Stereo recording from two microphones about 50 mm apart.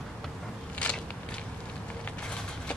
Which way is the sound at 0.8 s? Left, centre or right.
Left.